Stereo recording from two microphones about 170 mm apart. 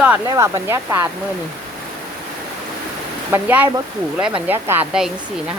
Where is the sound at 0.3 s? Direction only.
15° right (ahead or behind).